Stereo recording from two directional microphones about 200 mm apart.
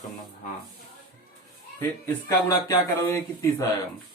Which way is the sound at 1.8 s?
15° left (ahead or behind).